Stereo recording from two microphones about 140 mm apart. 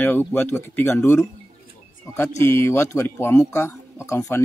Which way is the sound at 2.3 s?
15° left (ahead or behind).